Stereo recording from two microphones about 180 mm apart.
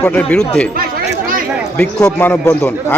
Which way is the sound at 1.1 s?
50° right (ahead or behind).